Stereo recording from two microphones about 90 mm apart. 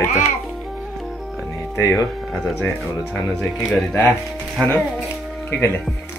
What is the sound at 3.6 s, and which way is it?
Speech, 15° left (ahead or behind).